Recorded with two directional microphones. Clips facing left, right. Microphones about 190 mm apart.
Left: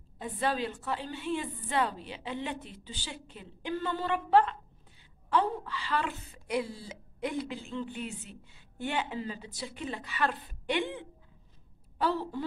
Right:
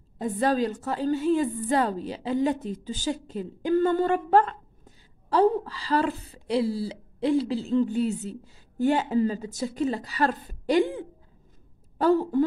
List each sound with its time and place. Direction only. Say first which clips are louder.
0.2 s a woman's voice: right 8 dB; 40° right (ahead or behind)